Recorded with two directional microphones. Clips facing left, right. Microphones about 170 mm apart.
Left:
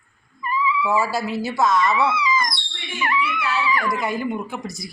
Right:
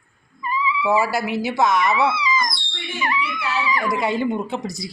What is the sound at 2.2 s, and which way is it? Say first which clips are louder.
Wail: left 1 dB; 10° right (ahead or behind).